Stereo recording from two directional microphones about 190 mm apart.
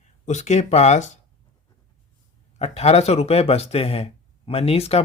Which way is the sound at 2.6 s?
35° left (ahead or behind).